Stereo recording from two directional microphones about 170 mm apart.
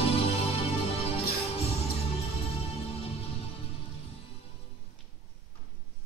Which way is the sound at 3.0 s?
35° left (ahead or behind).